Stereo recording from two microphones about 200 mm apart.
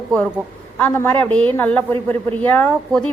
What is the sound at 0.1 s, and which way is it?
A woman's voice, 5° left (ahead or behind).